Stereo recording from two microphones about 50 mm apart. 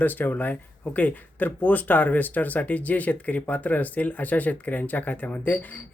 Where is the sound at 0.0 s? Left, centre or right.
Left.